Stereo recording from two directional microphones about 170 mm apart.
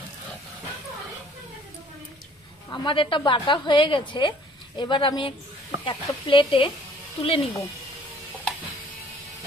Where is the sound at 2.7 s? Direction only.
25° left (ahead or behind).